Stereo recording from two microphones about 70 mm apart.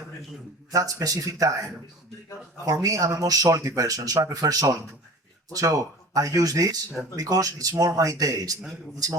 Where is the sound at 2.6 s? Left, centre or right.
Right.